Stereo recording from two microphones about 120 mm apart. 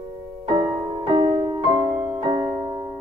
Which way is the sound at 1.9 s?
10° right (ahead or behind).